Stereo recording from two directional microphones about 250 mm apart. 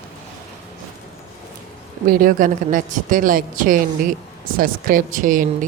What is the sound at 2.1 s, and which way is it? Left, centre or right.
A woman's voice, right.